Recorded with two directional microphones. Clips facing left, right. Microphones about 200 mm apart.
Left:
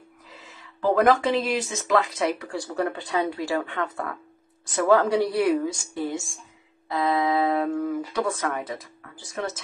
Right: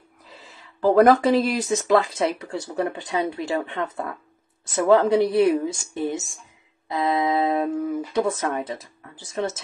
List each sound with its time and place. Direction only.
0.3 s speech: 35° right (ahead or behind)